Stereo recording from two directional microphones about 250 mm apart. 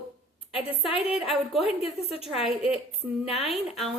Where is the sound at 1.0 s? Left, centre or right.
Centre.